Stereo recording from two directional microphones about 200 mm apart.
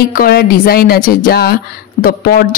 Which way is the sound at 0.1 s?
50° left (ahead or behind).